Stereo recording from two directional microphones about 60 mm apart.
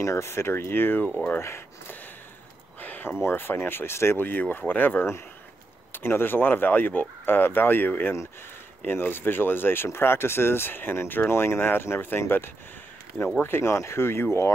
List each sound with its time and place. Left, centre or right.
0.0 s speech: left
0.3 s speech: left
2.8 s a sound: left
3.2 s speech: left